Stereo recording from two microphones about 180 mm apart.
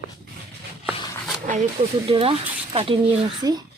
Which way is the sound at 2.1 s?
30° right (ahead or behind).